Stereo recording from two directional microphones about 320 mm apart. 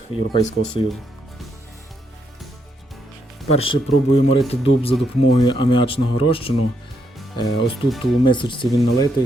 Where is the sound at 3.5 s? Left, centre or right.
Centre.